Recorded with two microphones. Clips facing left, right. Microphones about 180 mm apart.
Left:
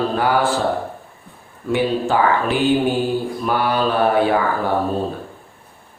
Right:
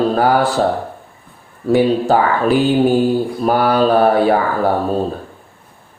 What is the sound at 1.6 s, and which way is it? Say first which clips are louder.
Mantra: right 6 dB; 40° right (ahead or behind).